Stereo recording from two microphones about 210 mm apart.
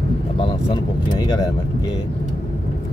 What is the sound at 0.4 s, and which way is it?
Speech, 20° left (ahead or behind).